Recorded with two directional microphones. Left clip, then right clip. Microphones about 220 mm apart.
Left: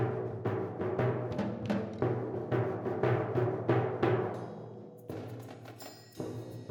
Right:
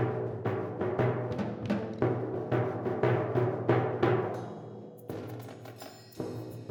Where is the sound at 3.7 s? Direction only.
10° right (ahead or behind).